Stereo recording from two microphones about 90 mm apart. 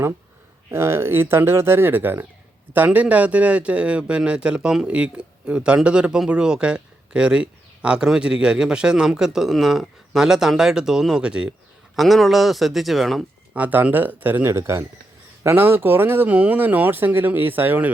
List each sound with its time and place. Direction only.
0.7 s a man's voice: 30° right (ahead or behind); by 11.5 s 10° right (ahead or behind)
11.9 s speech: centre (ahead or behind)
13.5 s speech: 15° right (ahead or behind)